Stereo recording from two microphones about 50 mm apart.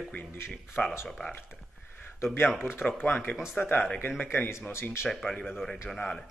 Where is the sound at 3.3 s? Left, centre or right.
Centre.